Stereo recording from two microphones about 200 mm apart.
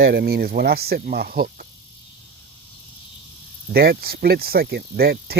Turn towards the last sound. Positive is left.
turn(degrees=-50)  # may be behind; listen again after turning